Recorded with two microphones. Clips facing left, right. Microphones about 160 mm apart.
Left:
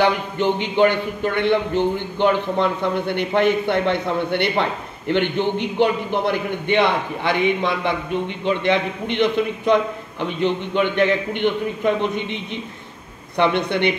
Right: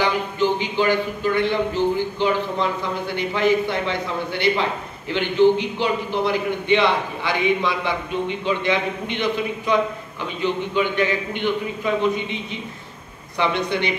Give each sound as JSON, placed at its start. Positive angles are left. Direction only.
{"t": 0.0, "sound": "speech", "side_deg": 60}
{"t": 9.1, "sound": "speech", "side_deg": 60}
{"t": 13.4, "sound": "speech", "side_deg": 60}